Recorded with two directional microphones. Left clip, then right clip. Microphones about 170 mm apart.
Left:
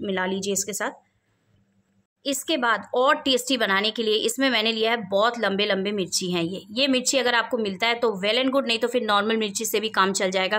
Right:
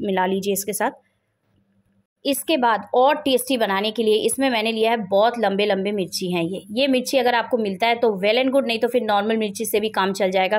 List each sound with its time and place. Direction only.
0.0 s a woman's voice: 20° right (ahead or behind)
2.2 s a woman's voice: 20° right (ahead or behind)